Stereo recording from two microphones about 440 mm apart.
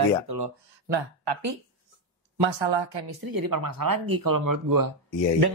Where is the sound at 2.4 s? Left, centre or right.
Right.